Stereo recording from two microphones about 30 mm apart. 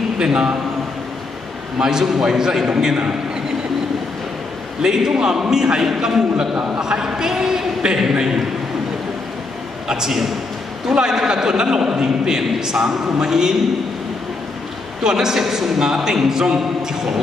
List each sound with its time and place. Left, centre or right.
0.2 s a man's voice: right
1.8 s a man's voice: centre
4.8 s a man's voice: centre
9.8 s a man's voice: centre
15.0 s a man's voice: centre